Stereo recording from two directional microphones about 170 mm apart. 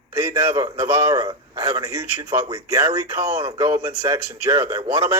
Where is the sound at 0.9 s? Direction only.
15° right (ahead or behind).